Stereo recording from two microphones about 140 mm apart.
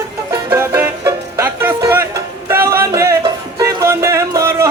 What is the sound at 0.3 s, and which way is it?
Music, 25° right (ahead or behind).